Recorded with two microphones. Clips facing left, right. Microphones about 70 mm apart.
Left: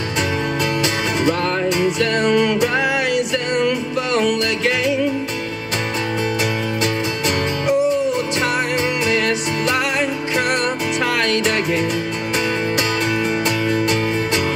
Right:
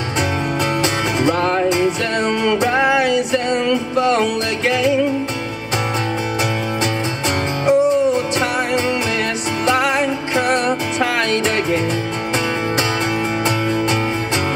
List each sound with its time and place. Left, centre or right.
1.2 s music: right
7.6 s music: right
9.7 s music: right
13.7 s music: right